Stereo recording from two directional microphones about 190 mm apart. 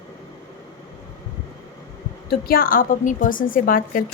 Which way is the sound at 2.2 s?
50° left (ahead or behind).